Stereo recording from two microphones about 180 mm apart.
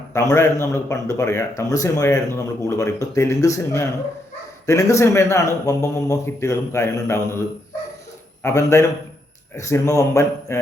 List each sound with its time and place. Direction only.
0.1 s a man's voice: 15° left (ahead or behind)
8.4 s a man's voice: 15° left (ahead or behind)